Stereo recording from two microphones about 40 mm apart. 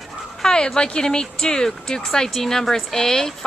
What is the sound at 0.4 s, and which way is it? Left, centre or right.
Speech, centre.